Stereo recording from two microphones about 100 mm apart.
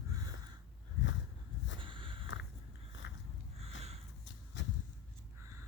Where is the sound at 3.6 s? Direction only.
90° right.